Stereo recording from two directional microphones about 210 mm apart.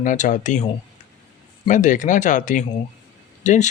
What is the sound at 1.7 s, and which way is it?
Speech, 35° left (ahead or behind).